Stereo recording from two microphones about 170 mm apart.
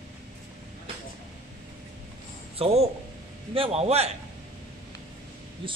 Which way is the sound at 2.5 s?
35° right (ahead or behind).